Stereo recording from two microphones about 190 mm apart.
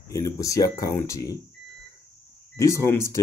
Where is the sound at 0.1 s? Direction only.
15° left (ahead or behind).